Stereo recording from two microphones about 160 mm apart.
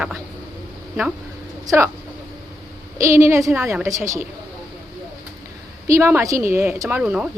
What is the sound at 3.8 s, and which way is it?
Speech, 20° right (ahead or behind).